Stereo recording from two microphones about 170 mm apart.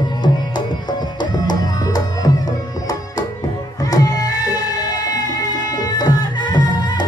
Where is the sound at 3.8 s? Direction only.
20° left (ahead or behind).